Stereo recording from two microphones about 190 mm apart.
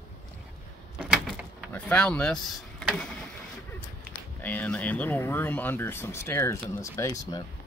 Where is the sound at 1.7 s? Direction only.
10° left (ahead or behind).